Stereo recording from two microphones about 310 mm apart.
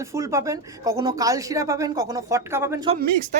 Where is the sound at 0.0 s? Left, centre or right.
Centre.